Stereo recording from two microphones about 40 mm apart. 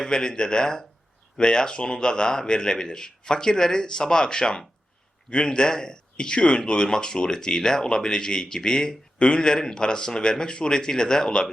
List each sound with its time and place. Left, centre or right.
0.0 s speech: centre